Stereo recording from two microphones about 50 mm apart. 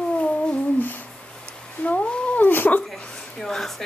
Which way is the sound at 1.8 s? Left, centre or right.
Left.